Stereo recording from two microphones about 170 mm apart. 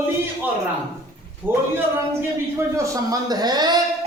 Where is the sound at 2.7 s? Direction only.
20° right (ahead or behind).